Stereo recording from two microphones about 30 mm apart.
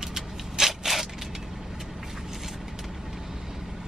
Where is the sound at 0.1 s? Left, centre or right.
Centre.